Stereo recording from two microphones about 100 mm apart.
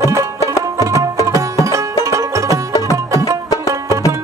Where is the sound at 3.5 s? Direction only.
35° left (ahead or behind).